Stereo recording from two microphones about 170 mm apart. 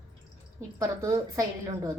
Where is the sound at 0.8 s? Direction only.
20° right (ahead or behind).